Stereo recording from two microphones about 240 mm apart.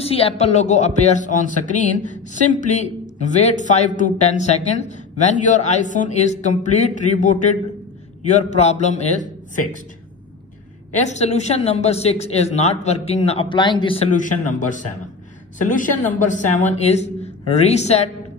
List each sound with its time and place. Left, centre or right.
0.0 s speech: left
11.0 s speech: left